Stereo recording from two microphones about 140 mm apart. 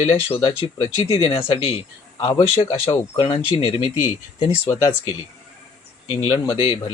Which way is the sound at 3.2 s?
35° left (ahead or behind).